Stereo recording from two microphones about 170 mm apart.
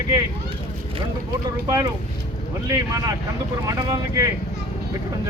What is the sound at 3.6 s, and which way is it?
Speech, 20° right (ahead or behind).